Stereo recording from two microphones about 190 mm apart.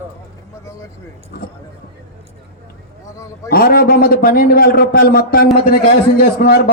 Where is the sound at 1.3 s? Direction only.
55° left (ahead or behind).